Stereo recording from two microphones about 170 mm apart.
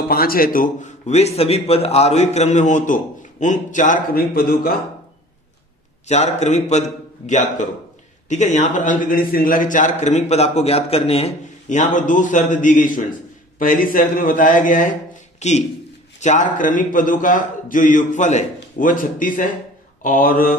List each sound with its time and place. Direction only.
0.1 s a man's voice: 60° left (ahead or behind)
6.0 s a man's voice: 40° left (ahead or behind)
20.0 s mantra: 55° left (ahead or behind)